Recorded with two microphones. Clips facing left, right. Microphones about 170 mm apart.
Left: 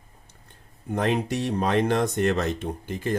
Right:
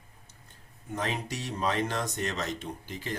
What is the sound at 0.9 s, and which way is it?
Speech, 60° left (ahead or behind).